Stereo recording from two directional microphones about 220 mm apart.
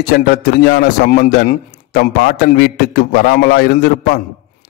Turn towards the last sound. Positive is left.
turn(degrees=45)  # may be behind; listen again after turning